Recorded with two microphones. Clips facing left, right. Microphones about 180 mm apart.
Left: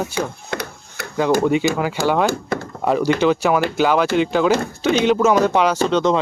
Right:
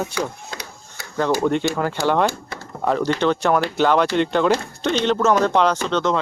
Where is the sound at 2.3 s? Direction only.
50° left (ahead or behind).